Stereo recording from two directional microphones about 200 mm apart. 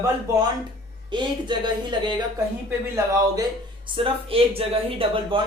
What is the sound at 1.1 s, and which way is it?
A man's voice, 25° right (ahead or behind).